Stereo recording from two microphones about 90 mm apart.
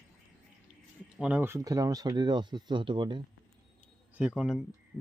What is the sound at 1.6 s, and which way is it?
Speech, 40° right (ahead or behind).